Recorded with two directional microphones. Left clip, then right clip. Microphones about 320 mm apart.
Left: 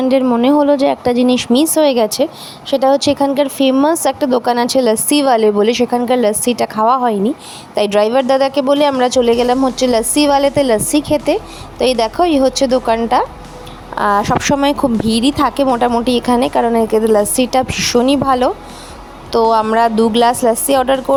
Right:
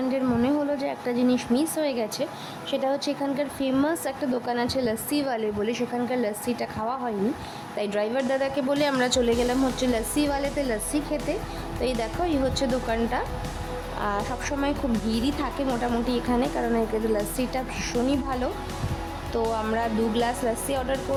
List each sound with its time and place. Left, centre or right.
0.1 s speech: left